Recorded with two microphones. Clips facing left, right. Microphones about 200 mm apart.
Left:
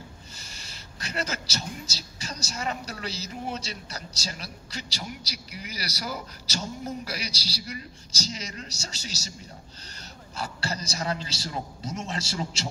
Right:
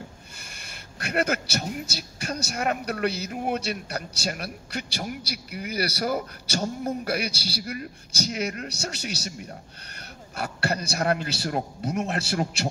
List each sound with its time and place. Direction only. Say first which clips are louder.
0.4 s speech: right 2 dB; 55° right (ahead or behind)